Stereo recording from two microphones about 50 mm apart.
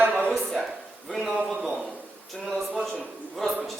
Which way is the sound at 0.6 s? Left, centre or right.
Centre.